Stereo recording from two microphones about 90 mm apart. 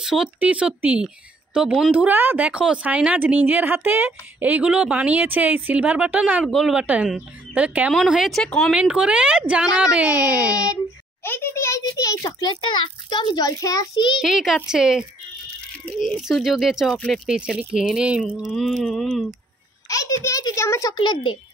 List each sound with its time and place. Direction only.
0.0 s speech: 5° right (ahead or behind)
1.9 s speech: 15° right (ahead or behind)
8.0 s speech: centre (ahead or behind)
8.7 s speech: 10° right (ahead or behind)
10.5 s a child's voice: 40° left (ahead or behind); by 13.5 s 60° left (ahead or behind)
13.5 s a child's voice: 40° left (ahead or behind)
14.2 s speech: 5° right (ahead or behind)
16.2 s speech: 5° right (ahead or behind)
17.3 s speech: 10° right (ahead or behind)
18.6 s speech: centre (ahead or behind)
19.9 s a child's voice: 40° left (ahead or behind)
20.9 s speech: 55° left (ahead or behind)